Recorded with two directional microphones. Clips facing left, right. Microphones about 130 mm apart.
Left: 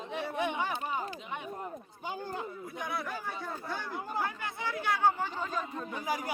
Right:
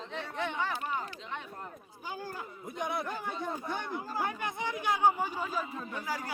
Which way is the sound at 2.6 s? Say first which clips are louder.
Right 2 dB; 20° right (ahead or behind).